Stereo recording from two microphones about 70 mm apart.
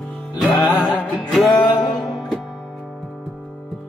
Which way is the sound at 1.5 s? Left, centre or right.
Left.